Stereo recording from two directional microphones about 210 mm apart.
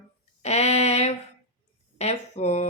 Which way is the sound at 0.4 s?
30° left (ahead or behind).